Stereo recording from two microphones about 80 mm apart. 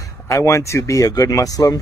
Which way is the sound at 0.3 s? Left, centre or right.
Left.